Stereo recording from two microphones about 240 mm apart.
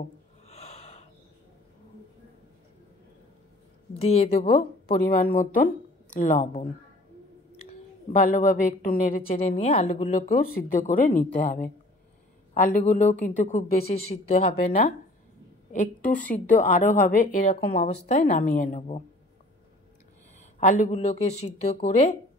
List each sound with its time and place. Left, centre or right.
0.5 s gasp: left
3.9 s a woman's voice: left
4.8 s a woman's voice: left
8.1 s a woman's voice: left
15.7 s a woman's voice: left
20.5 s a woman's voice: left